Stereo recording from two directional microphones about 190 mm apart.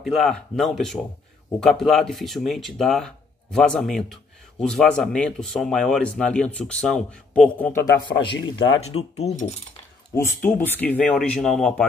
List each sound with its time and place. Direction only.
0.0 s speech: centre (ahead or behind); by 8.1 s 15° left (ahead or behind)
8.3 s speech: 70° left (ahead or behind)
9.1 s speech: 35° left (ahead or behind)
10.1 s speech: 15° left (ahead or behind)